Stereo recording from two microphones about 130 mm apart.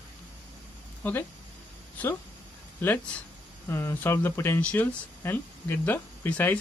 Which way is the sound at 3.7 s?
15° left (ahead or behind).